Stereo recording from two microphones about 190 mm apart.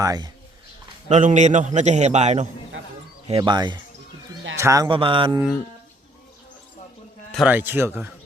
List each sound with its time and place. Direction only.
0.0 s a man's voice: 15° right (ahead or behind)
1.0 s a man's voice: 40° right (ahead or behind)
7.3 s a man's voice: 10° right (ahead or behind)